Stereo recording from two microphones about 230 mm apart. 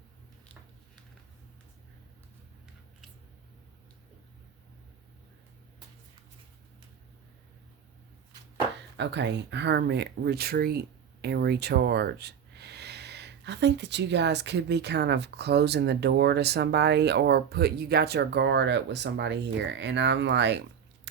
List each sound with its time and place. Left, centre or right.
9.0 s speech: right